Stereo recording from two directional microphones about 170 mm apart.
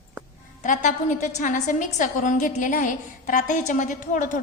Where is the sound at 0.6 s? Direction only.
50° left (ahead or behind).